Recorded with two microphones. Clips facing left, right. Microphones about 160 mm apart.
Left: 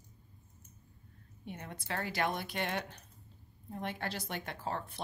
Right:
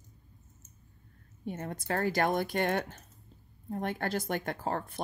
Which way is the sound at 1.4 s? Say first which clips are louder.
Right 7 dB; 45° right (ahead or behind).